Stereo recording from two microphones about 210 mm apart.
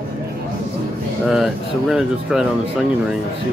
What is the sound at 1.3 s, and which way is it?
Speech, centre (ahead or behind).